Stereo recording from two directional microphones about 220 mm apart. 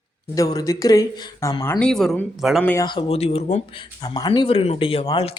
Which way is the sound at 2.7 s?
20° left (ahead or behind).